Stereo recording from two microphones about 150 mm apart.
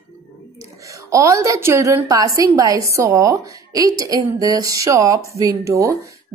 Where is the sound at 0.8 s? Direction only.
20° right (ahead or behind).